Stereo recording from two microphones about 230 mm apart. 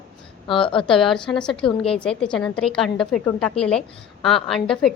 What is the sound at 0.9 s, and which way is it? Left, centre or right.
A woman's voice, centre.